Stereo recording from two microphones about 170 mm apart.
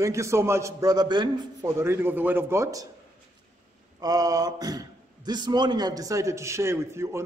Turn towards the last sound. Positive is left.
turn(degrees=-15)  # may be behind; listen again after turning